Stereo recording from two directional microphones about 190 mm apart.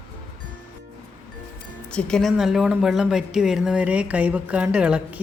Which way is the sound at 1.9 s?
Centre (ahead or behind).